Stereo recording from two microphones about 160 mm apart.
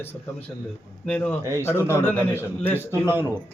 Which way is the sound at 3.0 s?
15° right (ahead or behind).